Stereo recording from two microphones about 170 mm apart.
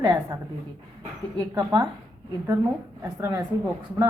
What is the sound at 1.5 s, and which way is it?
Speech, 25° right (ahead or behind).